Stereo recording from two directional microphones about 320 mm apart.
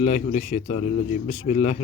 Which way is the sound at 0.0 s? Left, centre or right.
Left.